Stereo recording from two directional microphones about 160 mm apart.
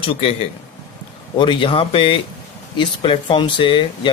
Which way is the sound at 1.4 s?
30° left (ahead or behind).